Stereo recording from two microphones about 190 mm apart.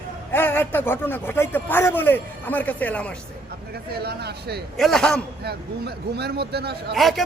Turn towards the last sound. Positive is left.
turn(degrees=0)  # may be behind; listen again after turning